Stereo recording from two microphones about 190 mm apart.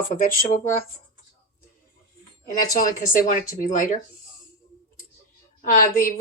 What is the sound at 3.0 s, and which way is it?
Speech, 45° left (ahead or behind).